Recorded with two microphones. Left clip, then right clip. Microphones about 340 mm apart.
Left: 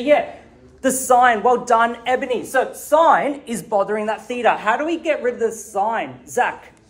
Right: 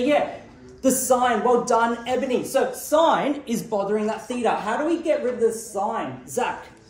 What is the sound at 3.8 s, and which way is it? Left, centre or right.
Speech, left.